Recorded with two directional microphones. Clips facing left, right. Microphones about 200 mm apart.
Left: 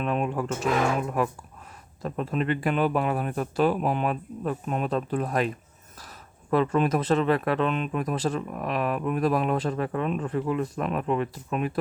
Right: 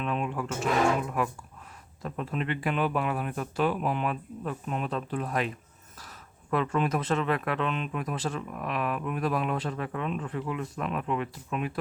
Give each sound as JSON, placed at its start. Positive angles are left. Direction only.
{"t": 0.0, "sound": "speech", "side_deg": 45}
{"t": 2.0, "sound": "speech", "side_deg": 40}
{"t": 6.5, "sound": "speech", "side_deg": 35}